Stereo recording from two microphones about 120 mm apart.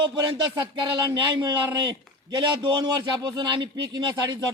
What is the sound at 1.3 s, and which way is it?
A man's voice, 35° right (ahead or behind).